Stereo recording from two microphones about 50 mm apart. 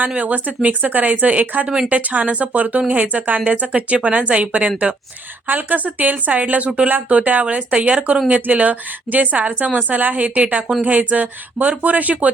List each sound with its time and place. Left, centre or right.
0.2 s a woman's voice: right